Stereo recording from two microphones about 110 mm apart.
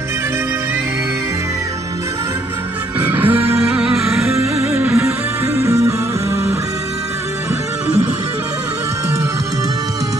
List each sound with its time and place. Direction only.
3.1 s music: 15° right (ahead or behind)
4.6 s music: 10° right (ahead or behind)
5.6 s music: 25° right (ahead or behind)